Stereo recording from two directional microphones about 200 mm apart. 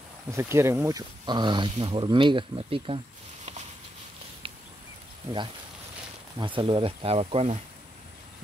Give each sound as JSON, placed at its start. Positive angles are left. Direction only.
{"t": 0.3, "sound": "speech", "side_deg": -15}
{"t": 6.4, "sound": "speech", "side_deg": -25}